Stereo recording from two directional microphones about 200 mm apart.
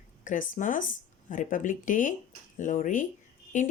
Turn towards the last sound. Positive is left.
turn(degrees=40)  # may be behind; listen again after turning